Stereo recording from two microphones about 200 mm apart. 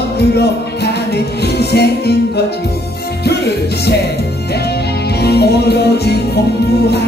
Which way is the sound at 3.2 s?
55° left (ahead or behind).